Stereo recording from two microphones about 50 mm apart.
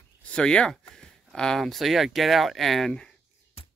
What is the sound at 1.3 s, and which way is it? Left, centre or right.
Speech, centre.